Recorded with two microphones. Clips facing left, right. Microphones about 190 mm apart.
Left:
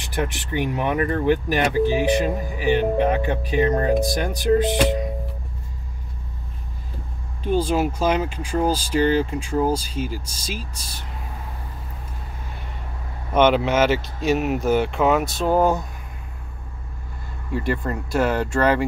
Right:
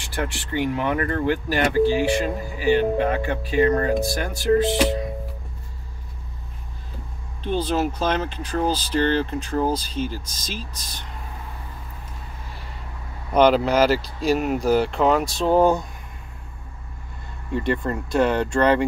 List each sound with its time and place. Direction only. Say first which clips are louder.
0.0 s speech: left 2 dB; 20° left (ahead or behind)
7.4 s speech: left 2 dB; 10° left (ahead or behind)
13.3 s speech: right 1 dB; centre (ahead or behind)
14.0 s speech: even; 35° right (ahead or behind)
14.4 s speech: even; 5° left (ahead or behind)
17.6 s speech: right 1 dB; 5° left (ahead or behind)